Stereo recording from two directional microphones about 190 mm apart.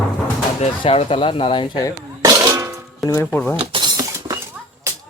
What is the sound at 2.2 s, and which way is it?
Music, 20° right (ahead or behind).